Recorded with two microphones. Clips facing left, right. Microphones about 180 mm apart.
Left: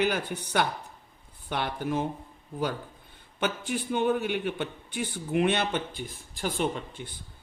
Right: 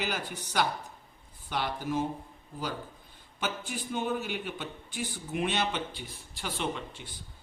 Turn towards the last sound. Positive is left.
turn(degrees=50)  # may be behind; listen again after turning